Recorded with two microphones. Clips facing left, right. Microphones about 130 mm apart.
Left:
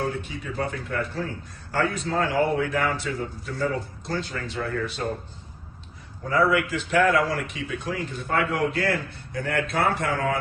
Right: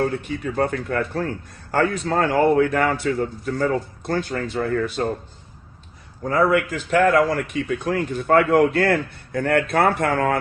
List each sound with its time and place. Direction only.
0.0 s a man's voice: 55° right (ahead or behind)
6.2 s a man's voice: 45° right (ahead or behind)